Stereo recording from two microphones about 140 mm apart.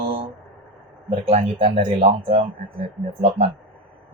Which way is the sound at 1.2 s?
45° right (ahead or behind).